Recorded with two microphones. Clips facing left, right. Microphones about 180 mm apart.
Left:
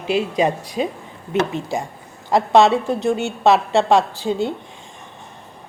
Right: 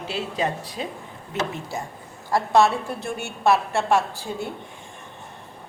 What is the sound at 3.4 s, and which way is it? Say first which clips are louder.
A woman's voice: left 5 dB; 90° left.